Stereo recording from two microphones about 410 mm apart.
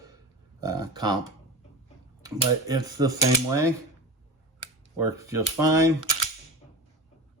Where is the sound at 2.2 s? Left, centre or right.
Centre.